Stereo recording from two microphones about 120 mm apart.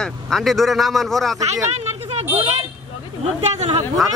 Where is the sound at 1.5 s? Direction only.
60° right (ahead or behind).